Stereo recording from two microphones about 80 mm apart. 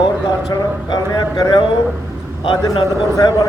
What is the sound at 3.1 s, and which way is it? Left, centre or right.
Speech, left.